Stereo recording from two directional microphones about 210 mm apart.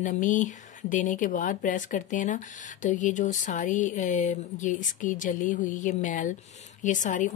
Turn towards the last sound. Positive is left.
turn(degrees=35)  # may be behind; listen again after turning